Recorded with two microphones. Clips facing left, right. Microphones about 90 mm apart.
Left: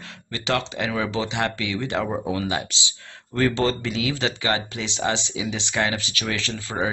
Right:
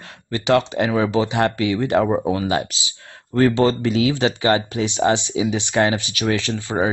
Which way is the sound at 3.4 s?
30° right (ahead or behind).